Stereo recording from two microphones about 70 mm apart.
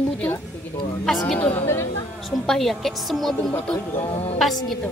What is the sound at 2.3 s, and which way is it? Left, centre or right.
Speech, centre.